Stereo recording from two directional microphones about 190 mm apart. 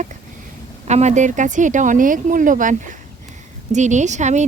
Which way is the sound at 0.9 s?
35° right (ahead or behind).